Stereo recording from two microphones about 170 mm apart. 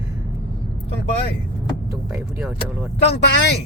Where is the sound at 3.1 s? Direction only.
85° left.